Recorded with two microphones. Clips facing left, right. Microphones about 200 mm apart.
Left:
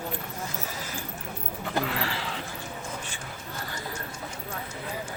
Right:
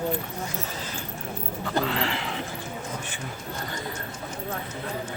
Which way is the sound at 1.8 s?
25° right (ahead or behind).